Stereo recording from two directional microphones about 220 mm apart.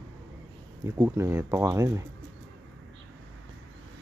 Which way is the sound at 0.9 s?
10° right (ahead or behind).